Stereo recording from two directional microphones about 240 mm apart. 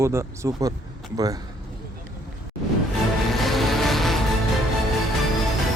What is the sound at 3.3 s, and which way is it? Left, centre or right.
Music, centre.